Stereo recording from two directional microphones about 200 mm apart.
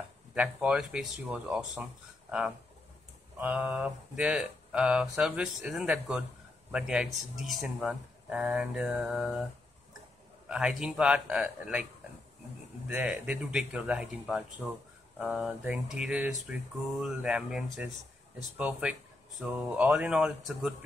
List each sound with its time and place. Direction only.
0.3 s speech: 5° right (ahead or behind)
3.3 s speech: 10° right (ahead or behind)
10.5 s speech: 5° right (ahead or behind)
12.8 s speech: 5° right (ahead or behind)